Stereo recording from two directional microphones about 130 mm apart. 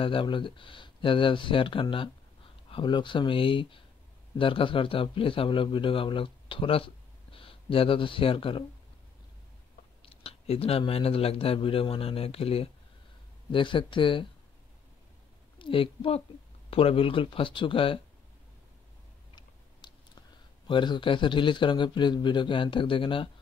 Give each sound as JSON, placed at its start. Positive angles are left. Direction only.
{"t": 0.0, "sound": "speech", "side_deg": 40}
{"t": 10.0, "sound": "a man's voice", "side_deg": 50}
{"t": 15.6, "sound": "a woman's voice", "side_deg": 45}
{"t": 20.2, "sound": "speech", "side_deg": 35}